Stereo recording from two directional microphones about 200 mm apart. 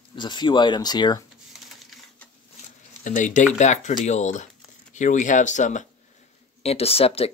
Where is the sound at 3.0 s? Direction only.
40° left (ahead or behind).